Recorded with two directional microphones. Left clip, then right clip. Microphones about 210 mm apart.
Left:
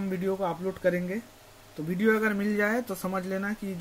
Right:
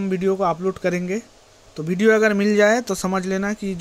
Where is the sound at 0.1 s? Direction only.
40° right (ahead or behind).